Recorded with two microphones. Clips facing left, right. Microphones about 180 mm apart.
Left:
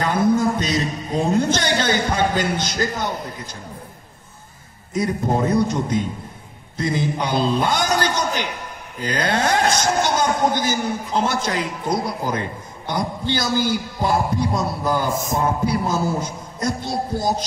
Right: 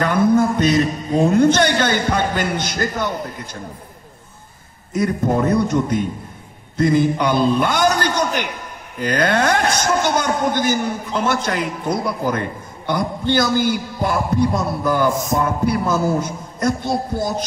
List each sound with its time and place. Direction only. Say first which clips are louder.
0.0 s a man's voice: right 3 dB; 55° right (ahead or behind)
4.9 s a man's voice: right 3 dB; 55° right (ahead or behind)
15.3 s a man's voice: right 2 dB; 55° right (ahead or behind)